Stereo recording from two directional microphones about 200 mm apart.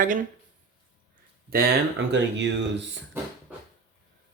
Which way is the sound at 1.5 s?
55° right (ahead or behind).